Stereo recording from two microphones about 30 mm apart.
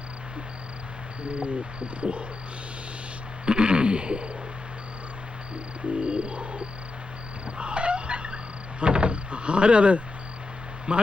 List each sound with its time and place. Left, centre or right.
1.2 s cricket: right
3.4 s cricket: right
5.9 s cricket: right
7.4 s a sound: right
8.8 s vehicle: right
10.9 s cricket: right